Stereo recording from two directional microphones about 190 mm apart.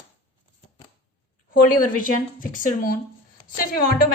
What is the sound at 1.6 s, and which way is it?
A woman's voice, 45° left (ahead or behind).